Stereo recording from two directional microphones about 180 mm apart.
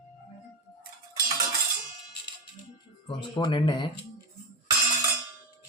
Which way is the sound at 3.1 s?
25° left (ahead or behind).